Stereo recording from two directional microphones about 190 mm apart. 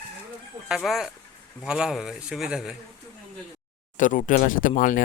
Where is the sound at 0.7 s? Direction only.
Centre (ahead or behind).